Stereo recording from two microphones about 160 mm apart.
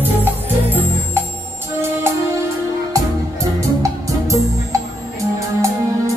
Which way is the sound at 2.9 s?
20° right (ahead or behind).